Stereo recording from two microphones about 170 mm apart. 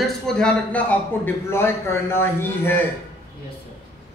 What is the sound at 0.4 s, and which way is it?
A man's voice, 10° left (ahead or behind).